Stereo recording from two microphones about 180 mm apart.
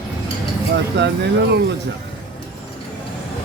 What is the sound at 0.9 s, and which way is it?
Speech, 70° right (ahead or behind).